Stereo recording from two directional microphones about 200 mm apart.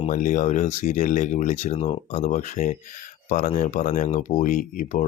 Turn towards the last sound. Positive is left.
turn(degrees=40)  # may be behind; listen again after turning